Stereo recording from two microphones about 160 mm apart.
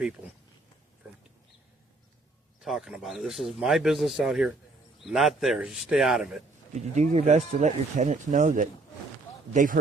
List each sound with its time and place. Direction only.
2.6 s speech: centre (ahead or behind)
6.9 s speech: 45° right (ahead or behind)